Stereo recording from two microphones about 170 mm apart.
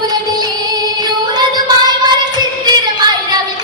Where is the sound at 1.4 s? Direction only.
25° right (ahead or behind).